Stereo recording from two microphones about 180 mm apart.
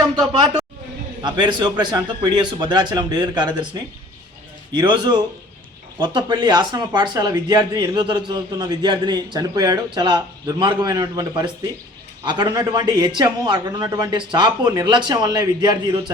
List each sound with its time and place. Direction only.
1.2 s speech: 25° right (ahead or behind)